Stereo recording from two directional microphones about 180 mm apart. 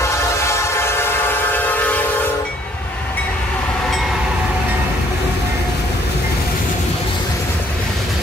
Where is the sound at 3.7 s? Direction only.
Centre (ahead or behind).